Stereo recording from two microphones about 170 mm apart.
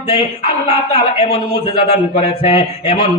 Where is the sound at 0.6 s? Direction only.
30° left (ahead or behind).